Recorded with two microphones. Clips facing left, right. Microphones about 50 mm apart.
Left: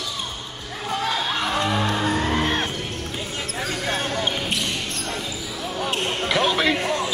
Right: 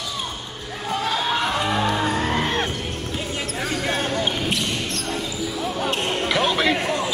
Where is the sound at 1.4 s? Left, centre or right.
Centre.